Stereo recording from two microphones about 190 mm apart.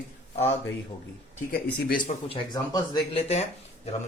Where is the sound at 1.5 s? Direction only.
50° left (ahead or behind).